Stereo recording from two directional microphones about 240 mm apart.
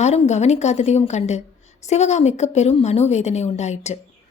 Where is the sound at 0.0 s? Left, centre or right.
Left.